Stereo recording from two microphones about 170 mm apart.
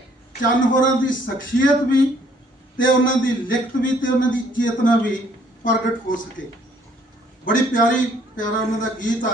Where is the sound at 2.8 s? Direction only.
55° left (ahead or behind).